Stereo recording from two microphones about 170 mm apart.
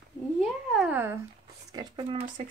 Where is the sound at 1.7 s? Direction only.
25° right (ahead or behind).